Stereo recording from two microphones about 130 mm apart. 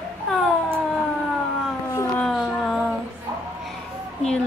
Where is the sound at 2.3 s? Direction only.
Centre (ahead or behind).